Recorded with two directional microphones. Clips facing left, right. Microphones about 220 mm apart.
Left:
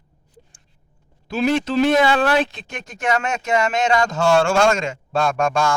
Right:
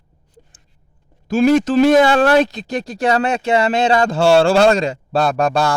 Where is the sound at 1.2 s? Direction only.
45° right (ahead or behind).